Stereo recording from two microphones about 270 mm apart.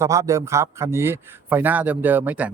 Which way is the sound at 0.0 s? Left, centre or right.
Centre.